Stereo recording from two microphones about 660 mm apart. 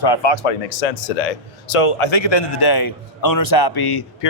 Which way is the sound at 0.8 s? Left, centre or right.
Left.